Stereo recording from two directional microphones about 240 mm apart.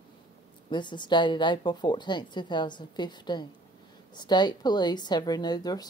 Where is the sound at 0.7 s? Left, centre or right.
Centre.